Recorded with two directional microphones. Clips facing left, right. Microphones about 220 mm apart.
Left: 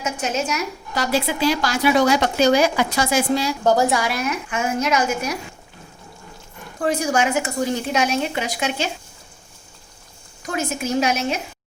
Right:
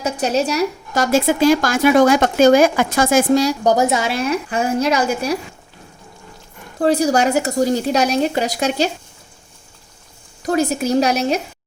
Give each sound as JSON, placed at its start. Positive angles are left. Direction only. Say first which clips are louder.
{"t": 0.0, "sound": "a woman's voice", "louder": "right 6 dB", "side_deg": -35}
{"t": 3.6, "sound": "speech", "louder": "right 2 dB", "side_deg": -20}
{"t": 6.7, "sound": "speech", "louder": "right 5 dB", "side_deg": -35}
{"t": 10.4, "sound": "speech", "louder": "right 7 dB", "side_deg": -35}